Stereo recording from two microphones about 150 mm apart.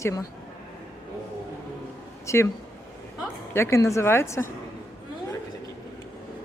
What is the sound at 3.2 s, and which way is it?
A woman's voice, 15° left (ahead or behind).